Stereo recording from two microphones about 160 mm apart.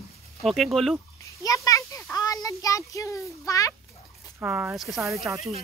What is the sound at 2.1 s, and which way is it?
A child's voice, 20° left (ahead or behind).